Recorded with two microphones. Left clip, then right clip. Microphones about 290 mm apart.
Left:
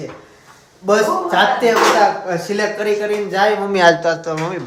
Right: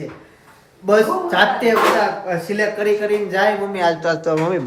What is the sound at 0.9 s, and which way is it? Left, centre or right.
A man's voice, centre.